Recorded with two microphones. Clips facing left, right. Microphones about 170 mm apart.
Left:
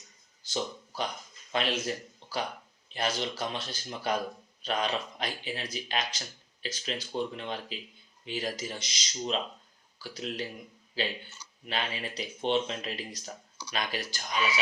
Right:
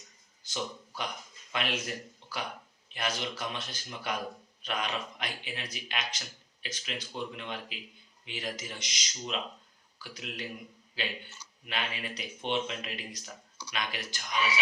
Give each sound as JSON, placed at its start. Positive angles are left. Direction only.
{"t": 0.4, "sound": "speech", "side_deg": 30}
{"t": 2.9, "sound": "speech", "side_deg": 35}